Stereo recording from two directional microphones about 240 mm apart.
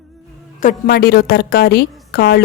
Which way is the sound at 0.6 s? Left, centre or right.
Left.